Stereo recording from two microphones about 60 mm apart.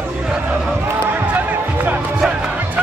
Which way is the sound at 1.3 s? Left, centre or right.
Right.